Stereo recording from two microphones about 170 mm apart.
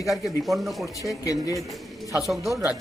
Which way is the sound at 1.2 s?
20° left (ahead or behind).